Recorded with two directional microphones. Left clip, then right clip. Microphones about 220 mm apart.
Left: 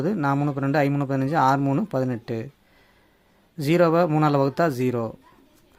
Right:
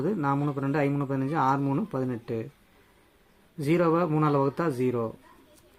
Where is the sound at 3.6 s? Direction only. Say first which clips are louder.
Left 5 dB; 40° left (ahead or behind).